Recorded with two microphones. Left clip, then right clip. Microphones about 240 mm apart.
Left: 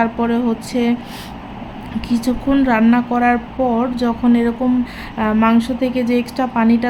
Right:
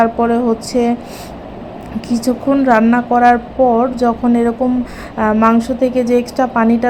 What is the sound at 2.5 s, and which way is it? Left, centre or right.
Speech, centre.